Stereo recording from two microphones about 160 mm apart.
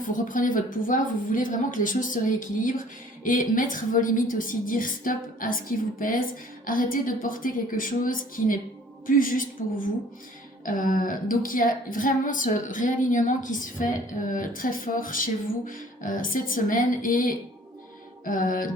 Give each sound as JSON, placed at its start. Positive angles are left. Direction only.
{"t": 0.3, "sound": "speech", "side_deg": 60}
{"t": 3.2, "sound": "speech", "side_deg": 55}
{"t": 10.7, "sound": "speech", "side_deg": 60}